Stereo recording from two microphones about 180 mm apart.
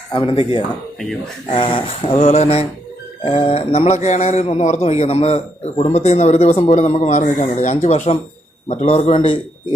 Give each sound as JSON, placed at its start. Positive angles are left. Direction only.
{"t": 0.1, "sound": "speech", "side_deg": 30}